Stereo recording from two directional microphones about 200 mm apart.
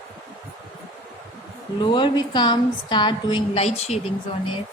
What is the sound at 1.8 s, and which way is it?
A woman's voice, 25° left (ahead or behind).